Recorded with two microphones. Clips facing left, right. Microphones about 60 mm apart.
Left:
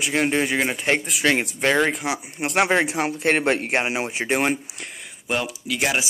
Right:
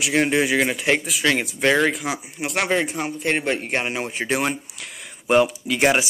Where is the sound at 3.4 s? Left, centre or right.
Left.